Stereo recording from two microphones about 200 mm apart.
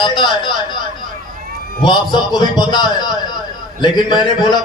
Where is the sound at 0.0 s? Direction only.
25° left (ahead or behind).